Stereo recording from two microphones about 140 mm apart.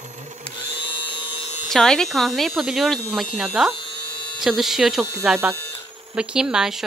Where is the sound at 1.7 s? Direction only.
5° left (ahead or behind).